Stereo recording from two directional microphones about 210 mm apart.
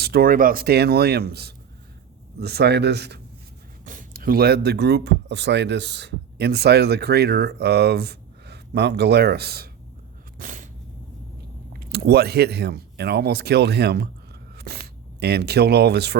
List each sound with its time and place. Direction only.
0.0 s speech: 45° right (ahead or behind)
3.8 s speech: 40° right (ahead or behind)
10.3 s a sound: 40° right (ahead or behind)
11.9 s speech: 50° right (ahead or behind)